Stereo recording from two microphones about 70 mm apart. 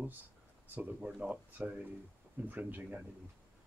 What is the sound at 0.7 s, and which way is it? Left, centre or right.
Speech, centre.